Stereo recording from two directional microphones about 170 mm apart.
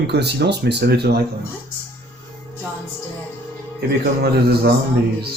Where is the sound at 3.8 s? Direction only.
70° right (ahead or behind).